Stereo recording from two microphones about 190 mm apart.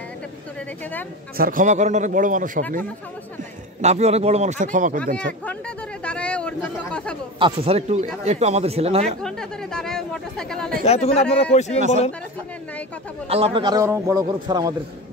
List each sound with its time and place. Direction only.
1.3 s a man's voice: 50° right (ahead or behind)
3.8 s speech: 35° right (ahead or behind)
6.0 s a sound: 5° left (ahead or behind)
7.3 s speech: 30° right (ahead or behind)
9.0 s speech: 5° left (ahead or behind)
10.8 s speech: 35° left (ahead or behind)
13.3 s a man's voice: 30° right (ahead or behind)